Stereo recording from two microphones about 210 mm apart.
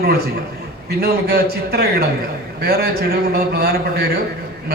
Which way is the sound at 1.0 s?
50° right (ahead or behind).